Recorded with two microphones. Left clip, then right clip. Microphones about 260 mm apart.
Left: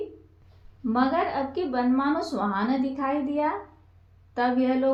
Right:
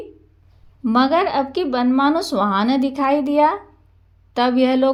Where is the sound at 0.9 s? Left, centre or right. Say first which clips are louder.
Right 8 dB; right.